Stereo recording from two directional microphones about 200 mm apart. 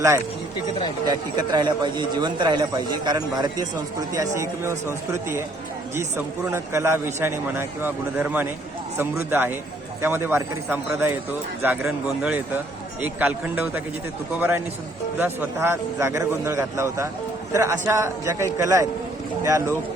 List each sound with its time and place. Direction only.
1.0 s a man's voice: 20° right (ahead or behind)
6.5 s a man's voice: 15° right (ahead or behind)